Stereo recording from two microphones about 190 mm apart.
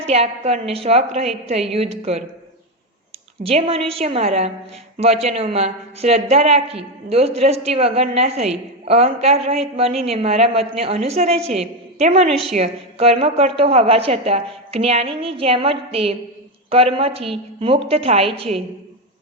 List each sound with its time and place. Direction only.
0.1 s a woman's voice: 35° right (ahead or behind)
3.4 s a woman's voice: 30° right (ahead or behind)